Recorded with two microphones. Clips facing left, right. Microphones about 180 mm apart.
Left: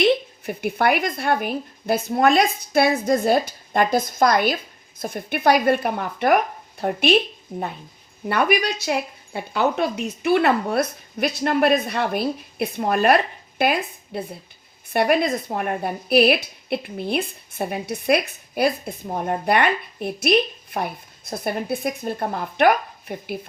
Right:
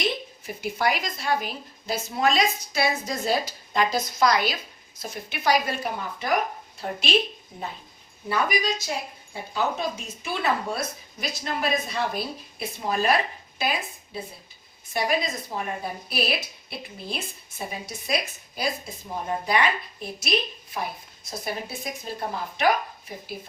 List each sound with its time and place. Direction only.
0.0 s a woman's voice: 60° left (ahead or behind)
8.3 s a woman's voice: 65° left (ahead or behind)